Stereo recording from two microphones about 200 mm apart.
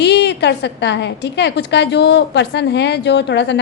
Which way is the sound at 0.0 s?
60° left (ahead or behind).